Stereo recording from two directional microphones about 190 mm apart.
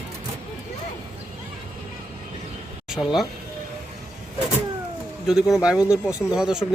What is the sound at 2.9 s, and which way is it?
Speech, centre (ahead or behind).